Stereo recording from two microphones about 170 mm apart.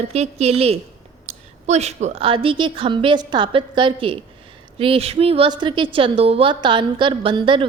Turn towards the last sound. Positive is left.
turn(degrees=-30)  # may be behind; listen again after turning